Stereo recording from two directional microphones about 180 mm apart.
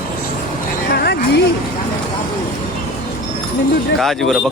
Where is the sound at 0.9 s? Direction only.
65° left (ahead or behind).